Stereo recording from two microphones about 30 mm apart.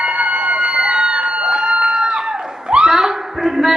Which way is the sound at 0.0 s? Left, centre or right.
Right.